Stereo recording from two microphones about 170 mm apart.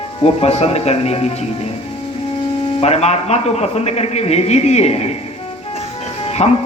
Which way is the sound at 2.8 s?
40° left (ahead or behind).